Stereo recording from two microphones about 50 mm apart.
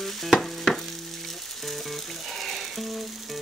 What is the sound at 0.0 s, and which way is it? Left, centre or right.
Frying, centre.